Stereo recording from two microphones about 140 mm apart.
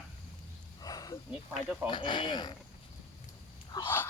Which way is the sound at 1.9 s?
35° left (ahead or behind).